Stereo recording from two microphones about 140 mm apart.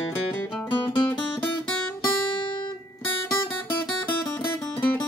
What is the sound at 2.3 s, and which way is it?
Guitar, 35° left (ahead or behind).